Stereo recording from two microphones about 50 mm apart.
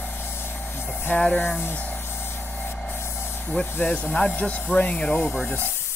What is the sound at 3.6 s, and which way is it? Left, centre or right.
Speech, left.